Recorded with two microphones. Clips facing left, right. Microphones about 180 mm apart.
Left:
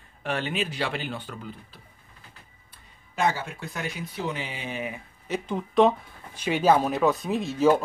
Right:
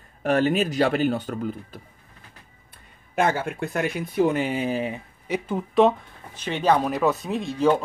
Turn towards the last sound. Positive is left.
turn(degrees=5)  # may be behind; listen again after turning